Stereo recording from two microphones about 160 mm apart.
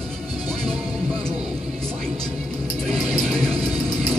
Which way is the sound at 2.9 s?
Centre (ahead or behind).